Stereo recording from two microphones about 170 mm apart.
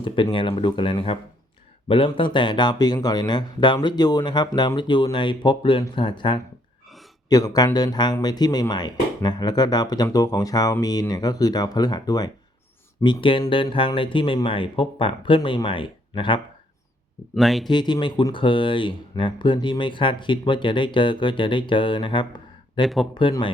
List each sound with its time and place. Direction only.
0.0 s speech: 30° left (ahead or behind)
17.3 s speech: centre (ahead or behind)
17.7 s speech: 25° left (ahead or behind)